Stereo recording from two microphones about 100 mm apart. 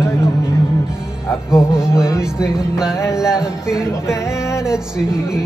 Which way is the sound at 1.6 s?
30° left (ahead or behind).